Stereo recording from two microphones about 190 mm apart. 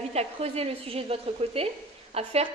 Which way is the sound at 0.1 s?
35° right (ahead or behind).